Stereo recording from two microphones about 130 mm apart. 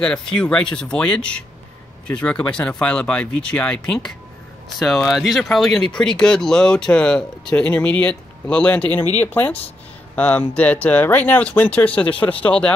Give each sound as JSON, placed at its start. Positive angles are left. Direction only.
{"t": 0.0, "sound": "speech", "side_deg": 5}